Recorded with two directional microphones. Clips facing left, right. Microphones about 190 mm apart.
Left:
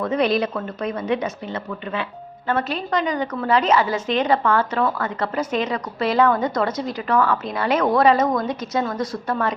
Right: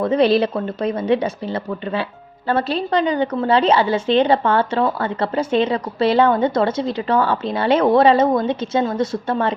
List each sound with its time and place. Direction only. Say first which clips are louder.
0.0 s a woman's voice: right 5 dB; 30° right (ahead or behind)